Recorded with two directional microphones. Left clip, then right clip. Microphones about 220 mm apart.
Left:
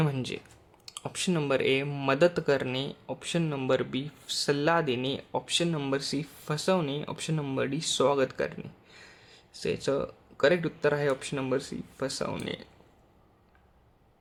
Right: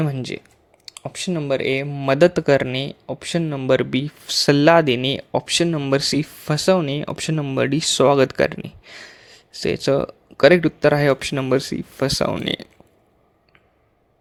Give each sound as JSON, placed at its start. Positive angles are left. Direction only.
{"t": 0.0, "sound": "speech", "side_deg": -25}
{"t": 6.0, "sound": "speech", "side_deg": -35}